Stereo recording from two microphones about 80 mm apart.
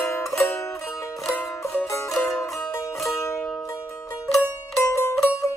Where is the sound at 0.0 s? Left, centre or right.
Left.